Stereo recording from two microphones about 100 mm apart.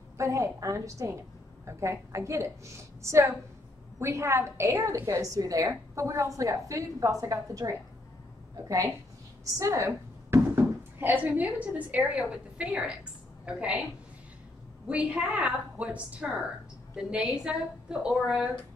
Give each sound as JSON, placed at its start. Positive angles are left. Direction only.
{"t": 0.2, "sound": "a woman's voice", "side_deg": -30}
{"t": 9.4, "sound": "a woman's voice", "side_deg": -35}
{"t": 14.9, "sound": "a woman's voice", "side_deg": -15}